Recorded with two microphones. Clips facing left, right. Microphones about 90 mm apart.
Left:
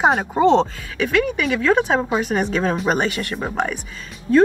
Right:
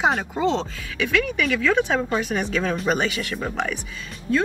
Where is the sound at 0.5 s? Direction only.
50° left (ahead or behind).